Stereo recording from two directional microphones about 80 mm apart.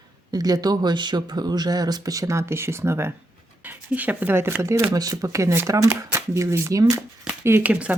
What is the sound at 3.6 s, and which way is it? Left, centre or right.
Speech, right.